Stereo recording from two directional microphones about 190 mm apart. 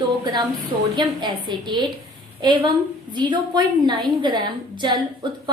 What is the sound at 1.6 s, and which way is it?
A woman's voice, 20° right (ahead or behind).